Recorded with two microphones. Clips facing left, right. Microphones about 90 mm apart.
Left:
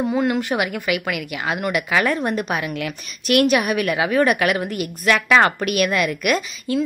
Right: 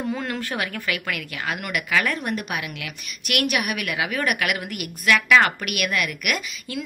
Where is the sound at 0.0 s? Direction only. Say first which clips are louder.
Left 7 dB; 20° left (ahead or behind).